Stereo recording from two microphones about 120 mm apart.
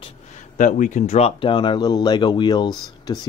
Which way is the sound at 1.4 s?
40° left (ahead or behind).